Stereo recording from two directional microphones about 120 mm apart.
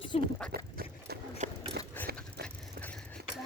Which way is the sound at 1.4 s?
75° right (ahead or behind).